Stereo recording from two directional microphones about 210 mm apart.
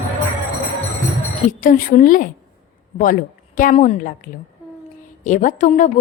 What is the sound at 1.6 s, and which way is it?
A woman's voice, 40° left (ahead or behind).